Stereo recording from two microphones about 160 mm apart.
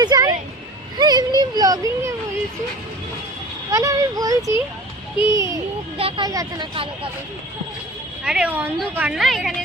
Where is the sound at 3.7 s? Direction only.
20° right (ahead or behind).